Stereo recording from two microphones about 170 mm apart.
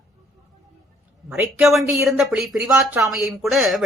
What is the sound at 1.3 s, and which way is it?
Speech, centre (ahead or behind).